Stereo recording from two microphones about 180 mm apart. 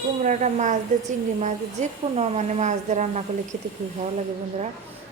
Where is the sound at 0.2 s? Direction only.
40° right (ahead or behind).